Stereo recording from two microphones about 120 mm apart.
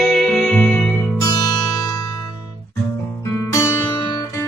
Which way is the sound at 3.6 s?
25° left (ahead or behind).